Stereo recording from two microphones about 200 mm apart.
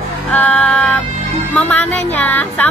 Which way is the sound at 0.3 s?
5° left (ahead or behind).